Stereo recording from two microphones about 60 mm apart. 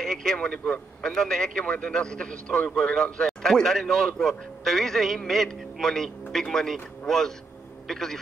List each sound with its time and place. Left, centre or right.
0.0 s a man's voice: centre